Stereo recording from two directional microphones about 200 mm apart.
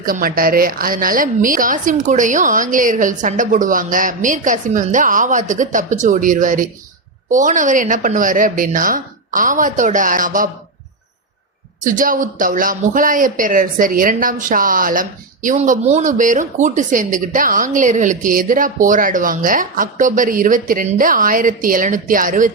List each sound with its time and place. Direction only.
0.0 s speech: 45° right (ahead or behind)
11.9 s speech: 40° right (ahead or behind)